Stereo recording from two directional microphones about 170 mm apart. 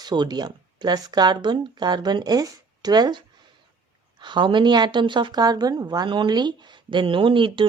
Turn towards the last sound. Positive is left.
turn(degrees=-30)  # may be behind; listen again after turning